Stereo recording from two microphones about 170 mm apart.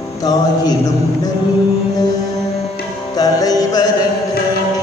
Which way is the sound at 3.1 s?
20° left (ahead or behind).